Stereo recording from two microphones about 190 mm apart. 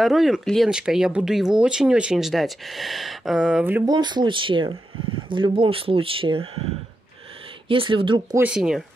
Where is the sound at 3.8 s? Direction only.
20° right (ahead or behind).